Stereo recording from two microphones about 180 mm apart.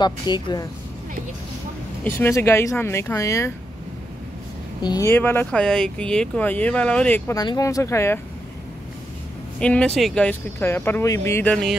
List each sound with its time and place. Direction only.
0.0 s speech: 25° left (ahead or behind)
2.0 s speech: 15° left (ahead or behind)
4.8 s speech: 15° left (ahead or behind)
7.3 s speech: 20° left (ahead or behind)
9.6 s speech: 5° left (ahead or behind)